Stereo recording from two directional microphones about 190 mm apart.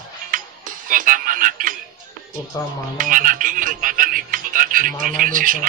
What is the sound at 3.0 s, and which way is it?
Speech, 45° right (ahead or behind).